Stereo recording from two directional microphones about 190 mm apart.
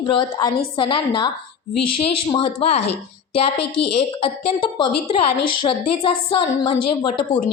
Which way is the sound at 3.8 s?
60° left (ahead or behind).